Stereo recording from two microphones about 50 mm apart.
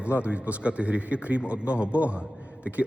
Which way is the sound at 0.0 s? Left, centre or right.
Right.